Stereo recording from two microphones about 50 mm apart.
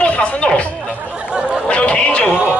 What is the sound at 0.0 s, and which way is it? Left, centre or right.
Music, left.